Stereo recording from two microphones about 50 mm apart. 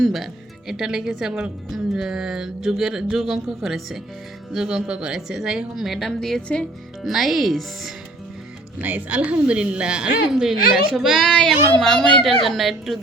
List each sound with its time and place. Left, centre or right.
0.0 s music: centre
0.7 s a woman's voice: centre
8.8 s a woman's voice: right; by 11.2 s centre
11.2 s a child's voice: centre